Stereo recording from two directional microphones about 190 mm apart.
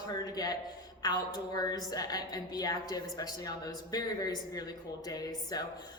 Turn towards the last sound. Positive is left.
turn(degrees=20)  # may be behind; listen again after turning